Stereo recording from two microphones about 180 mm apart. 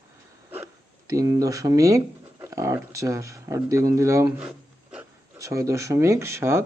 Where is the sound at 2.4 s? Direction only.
15° right (ahead or behind).